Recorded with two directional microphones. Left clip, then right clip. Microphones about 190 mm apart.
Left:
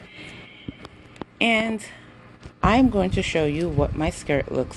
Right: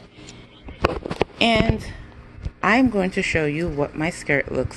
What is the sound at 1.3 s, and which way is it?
Speech, 5° right (ahead or behind).